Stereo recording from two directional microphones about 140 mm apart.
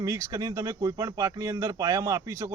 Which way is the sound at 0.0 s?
25° right (ahead or behind).